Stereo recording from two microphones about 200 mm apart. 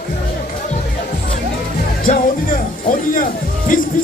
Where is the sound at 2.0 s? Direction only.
40° left (ahead or behind).